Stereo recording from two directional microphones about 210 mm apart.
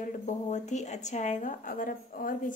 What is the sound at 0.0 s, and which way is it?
A woman's voice, 35° left (ahead or behind).